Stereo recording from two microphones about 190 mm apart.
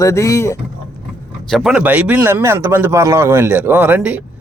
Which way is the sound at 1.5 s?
Centre (ahead or behind).